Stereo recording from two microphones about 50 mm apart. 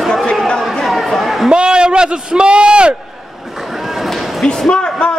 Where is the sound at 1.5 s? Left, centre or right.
Centre.